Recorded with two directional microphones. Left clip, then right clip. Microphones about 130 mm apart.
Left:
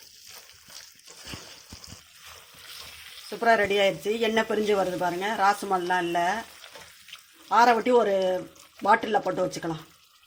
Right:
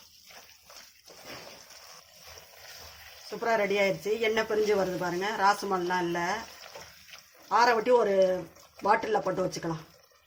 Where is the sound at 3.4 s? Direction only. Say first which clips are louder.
Left 5 dB; 55° left (ahead or behind).